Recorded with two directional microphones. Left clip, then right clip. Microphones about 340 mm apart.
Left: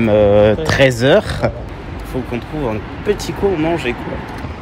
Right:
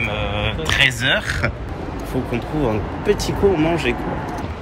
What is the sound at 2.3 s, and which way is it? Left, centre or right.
Speech, centre.